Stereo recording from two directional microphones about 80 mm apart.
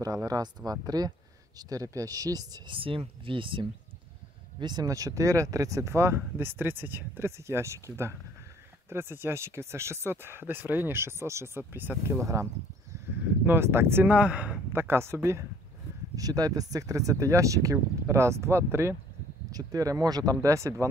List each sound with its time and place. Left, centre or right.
0.0 s speech: right
2.6 s speech: right
4.6 s speech: right
4.8 s speech: right
13.5 s speech: right
14.1 s speech: centre
14.7 s speech: right
16.2 s speech: right
19.5 s speech: right